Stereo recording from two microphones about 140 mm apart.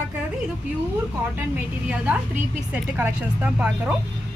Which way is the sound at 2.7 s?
15° right (ahead or behind).